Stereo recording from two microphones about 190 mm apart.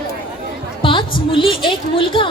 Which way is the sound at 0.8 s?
25° left (ahead or behind).